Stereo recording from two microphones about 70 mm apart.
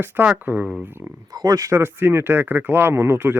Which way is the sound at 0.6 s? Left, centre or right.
Centre.